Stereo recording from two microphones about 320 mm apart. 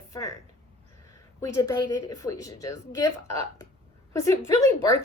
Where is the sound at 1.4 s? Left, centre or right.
Centre.